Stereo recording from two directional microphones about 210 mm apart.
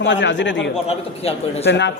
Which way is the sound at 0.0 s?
60° left (ahead or behind).